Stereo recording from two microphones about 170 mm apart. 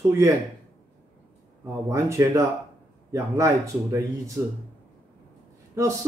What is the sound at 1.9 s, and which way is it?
Speech, 15° right (ahead or behind).